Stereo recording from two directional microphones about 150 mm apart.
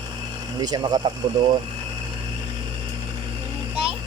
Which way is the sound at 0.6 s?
30° right (ahead or behind).